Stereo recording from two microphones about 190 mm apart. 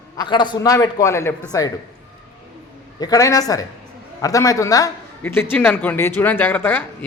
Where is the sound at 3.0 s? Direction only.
20° left (ahead or behind).